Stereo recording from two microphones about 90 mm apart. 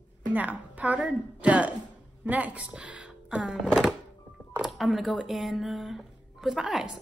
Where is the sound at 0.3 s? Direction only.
20° right (ahead or behind).